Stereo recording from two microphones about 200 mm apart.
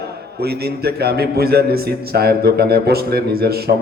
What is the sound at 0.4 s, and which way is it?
A man's voice, 55° right (ahead or behind).